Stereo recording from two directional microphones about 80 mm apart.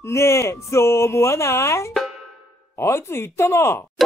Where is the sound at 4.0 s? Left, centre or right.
Centre.